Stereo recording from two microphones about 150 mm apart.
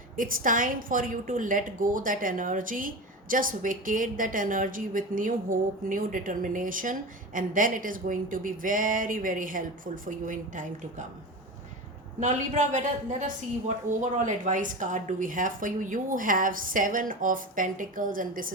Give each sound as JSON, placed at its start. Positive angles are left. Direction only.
{"t": 0.2, "sound": "a woman's voice", "side_deg": -65}
{"t": 12.2, "sound": "a woman's voice", "side_deg": -55}